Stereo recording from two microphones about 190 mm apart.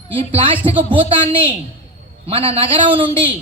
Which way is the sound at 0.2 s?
30° right (ahead or behind).